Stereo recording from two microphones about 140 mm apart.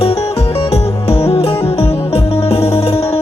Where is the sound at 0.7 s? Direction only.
45° left (ahead or behind).